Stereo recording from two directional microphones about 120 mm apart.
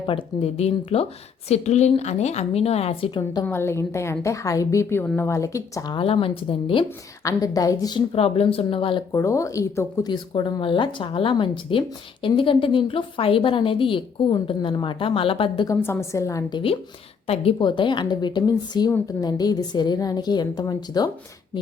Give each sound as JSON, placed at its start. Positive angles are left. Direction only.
{"t": 0.0, "sound": "a woman's voice", "side_deg": 45}
{"t": 3.4, "sound": "a woman's voice", "side_deg": 20}
{"t": 5.9, "sound": "speech", "side_deg": 45}
{"t": 7.3, "sound": "a woman's voice", "side_deg": 30}
{"t": 7.9, "sound": "speech", "side_deg": 55}
{"t": 9.1, "sound": "a woman's voice", "side_deg": 25}
{"t": 10.1, "sound": "speech", "side_deg": 40}
{"t": 15.6, "sound": "a woman's voice", "side_deg": 20}
{"t": 16.5, "sound": "a woman's voice", "side_deg": 40}
{"t": 17.2, "sound": "a woman's voice", "side_deg": 60}
{"t": 17.6, "sound": "a woman's voice", "side_deg": 40}